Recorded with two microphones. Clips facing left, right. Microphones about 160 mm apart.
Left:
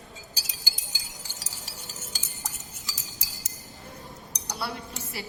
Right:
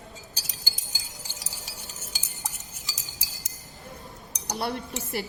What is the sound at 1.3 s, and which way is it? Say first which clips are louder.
Chink: right 1 dB; centre (ahead or behind).